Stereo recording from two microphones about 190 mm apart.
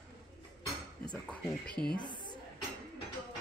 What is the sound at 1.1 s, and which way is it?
Speech, 5° left (ahead or behind).